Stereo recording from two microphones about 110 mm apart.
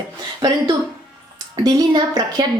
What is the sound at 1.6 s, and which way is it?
Speech, 35° right (ahead or behind).